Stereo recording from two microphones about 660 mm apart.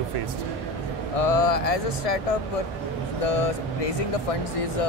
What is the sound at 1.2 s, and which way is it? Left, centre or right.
Speech, left.